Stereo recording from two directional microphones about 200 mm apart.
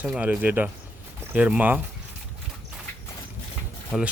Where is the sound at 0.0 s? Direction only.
5° right (ahead or behind).